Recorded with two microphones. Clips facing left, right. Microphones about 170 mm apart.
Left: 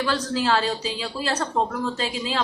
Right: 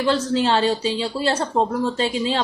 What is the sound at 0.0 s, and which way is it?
A woman's voice, 25° right (ahead or behind).